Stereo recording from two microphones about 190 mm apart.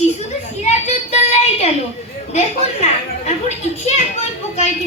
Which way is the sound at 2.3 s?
35° left (ahead or behind).